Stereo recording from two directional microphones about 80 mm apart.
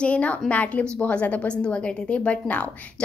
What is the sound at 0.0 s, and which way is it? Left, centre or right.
A woman's voice, centre.